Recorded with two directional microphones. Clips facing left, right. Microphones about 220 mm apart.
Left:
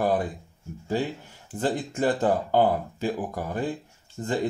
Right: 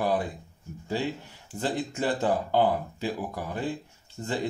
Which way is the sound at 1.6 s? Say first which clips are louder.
Left 3 dB; 50° left (ahead or behind).